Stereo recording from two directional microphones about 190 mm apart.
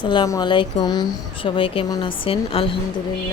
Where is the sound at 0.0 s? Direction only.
25° left (ahead or behind).